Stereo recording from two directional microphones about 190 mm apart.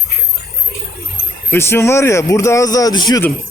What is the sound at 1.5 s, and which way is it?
Speech, 10° left (ahead or behind).